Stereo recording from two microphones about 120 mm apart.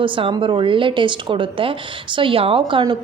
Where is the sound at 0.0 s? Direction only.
45° right (ahead or behind).